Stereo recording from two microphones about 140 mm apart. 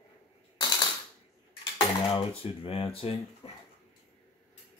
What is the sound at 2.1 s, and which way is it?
Speech, 35° left (ahead or behind).